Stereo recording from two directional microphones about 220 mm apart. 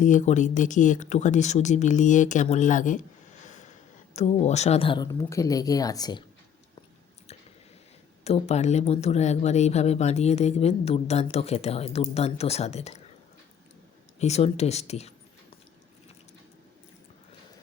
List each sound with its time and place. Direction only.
0.0 s speech: 35° left (ahead or behind); by 6.2 s 20° left (ahead or behind)
8.2 s speech: 30° left (ahead or behind)
14.2 s speech: 30° left (ahead or behind)